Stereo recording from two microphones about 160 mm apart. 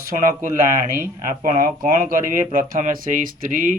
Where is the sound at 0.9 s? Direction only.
55° right (ahead or behind).